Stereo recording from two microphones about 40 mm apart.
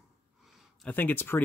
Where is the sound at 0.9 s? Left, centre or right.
Left.